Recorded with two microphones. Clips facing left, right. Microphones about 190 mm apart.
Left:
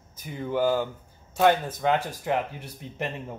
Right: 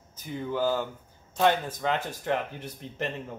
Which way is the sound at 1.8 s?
10° left (ahead or behind).